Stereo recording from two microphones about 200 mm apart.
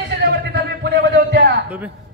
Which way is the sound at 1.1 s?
60° right (ahead or behind).